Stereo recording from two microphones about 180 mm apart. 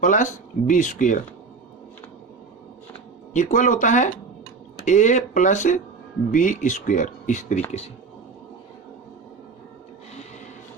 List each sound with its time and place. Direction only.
0.0 s speech: 45° left (ahead or behind)
3.3 s speech: 45° left (ahead or behind)